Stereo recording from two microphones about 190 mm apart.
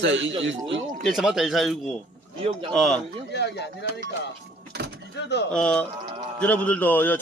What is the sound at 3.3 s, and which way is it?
Speech, 65° left (ahead or behind).